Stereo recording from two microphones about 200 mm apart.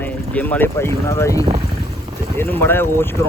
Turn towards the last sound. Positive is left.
turn(degrees=10)  # may be behind; listen again after turning